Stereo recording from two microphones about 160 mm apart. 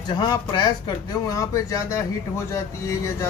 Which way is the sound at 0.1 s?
25° left (ahead or behind).